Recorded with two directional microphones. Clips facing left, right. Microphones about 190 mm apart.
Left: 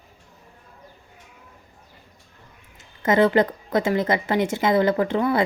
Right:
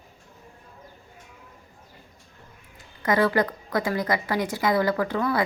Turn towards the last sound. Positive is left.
turn(degrees=25)  # may be behind; listen again after turning